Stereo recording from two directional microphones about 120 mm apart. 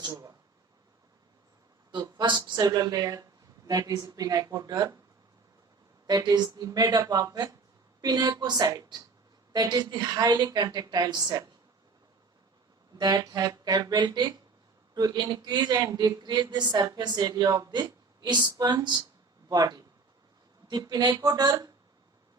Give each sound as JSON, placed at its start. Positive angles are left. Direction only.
{"t": 0.0, "sound": "a sound", "side_deg": -30}
{"t": 1.9, "sound": "speech", "side_deg": -35}
{"t": 6.1, "sound": "speech", "side_deg": -35}
{"t": 13.0, "sound": "speech", "side_deg": -30}